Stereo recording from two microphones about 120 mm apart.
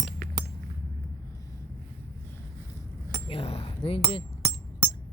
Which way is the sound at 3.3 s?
55° left (ahead or behind).